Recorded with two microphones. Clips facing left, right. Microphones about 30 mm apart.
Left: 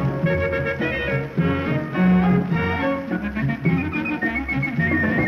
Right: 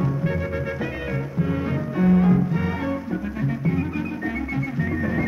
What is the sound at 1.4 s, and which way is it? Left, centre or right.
Music, left.